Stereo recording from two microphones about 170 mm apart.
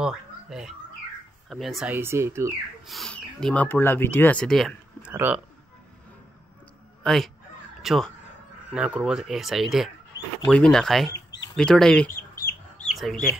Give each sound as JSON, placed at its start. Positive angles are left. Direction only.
{"t": 0.0, "sound": "a sound", "side_deg": -5}
{"t": 1.5, "sound": "speech", "side_deg": 0}
{"t": 2.0, "sound": "speech", "side_deg": -15}
{"t": 2.9, "sound": "speech", "side_deg": 0}
{"t": 5.1, "sound": "speech", "side_deg": -10}
{"t": 7.0, "sound": "fowl", "side_deg": 0}
{"t": 7.8, "sound": "speech", "side_deg": 0}
{"t": 11.1, "sound": "a sound", "side_deg": 90}
{"t": 11.5, "sound": "speech", "side_deg": 5}